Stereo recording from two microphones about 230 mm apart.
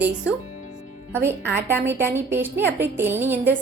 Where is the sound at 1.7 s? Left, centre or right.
Centre.